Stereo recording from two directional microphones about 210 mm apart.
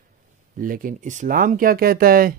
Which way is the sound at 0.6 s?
40° right (ahead or behind).